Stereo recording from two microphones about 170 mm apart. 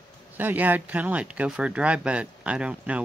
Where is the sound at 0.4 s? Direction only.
10° right (ahead or behind).